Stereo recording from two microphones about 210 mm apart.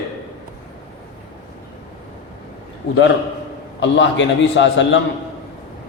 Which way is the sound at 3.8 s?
60° left (ahead or behind).